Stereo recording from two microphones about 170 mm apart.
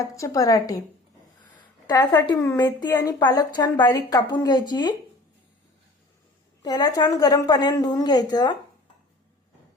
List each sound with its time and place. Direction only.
0.0 s a woman's voice: 20° left (ahead or behind)
1.9 s a woman's voice: 25° left (ahead or behind)
6.6 s a woman's voice: 25° left (ahead or behind)